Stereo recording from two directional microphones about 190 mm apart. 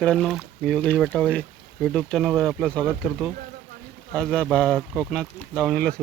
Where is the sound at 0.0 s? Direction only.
5° left (ahead or behind).